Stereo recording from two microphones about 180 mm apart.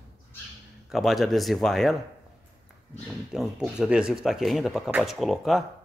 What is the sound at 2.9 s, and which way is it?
Speech, centre (ahead or behind).